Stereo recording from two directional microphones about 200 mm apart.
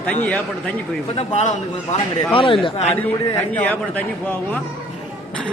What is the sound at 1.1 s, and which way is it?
A man's voice, 30° left (ahead or behind).